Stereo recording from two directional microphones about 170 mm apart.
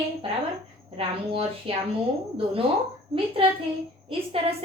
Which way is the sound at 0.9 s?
35° right (ahead or behind).